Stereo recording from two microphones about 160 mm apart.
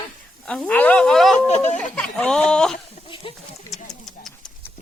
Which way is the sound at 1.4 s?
45° left (ahead or behind).